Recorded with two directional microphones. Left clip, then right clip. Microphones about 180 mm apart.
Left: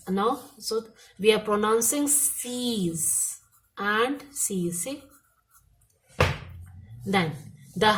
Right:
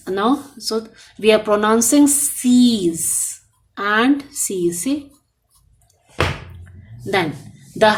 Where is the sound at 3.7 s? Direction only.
35° right (ahead or behind).